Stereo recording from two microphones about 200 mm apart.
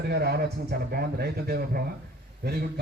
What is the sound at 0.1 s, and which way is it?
A man's voice, 55° right (ahead or behind).